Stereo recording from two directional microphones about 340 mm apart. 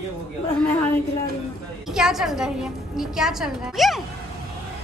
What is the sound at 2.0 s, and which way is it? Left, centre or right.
A woman's voice, centre.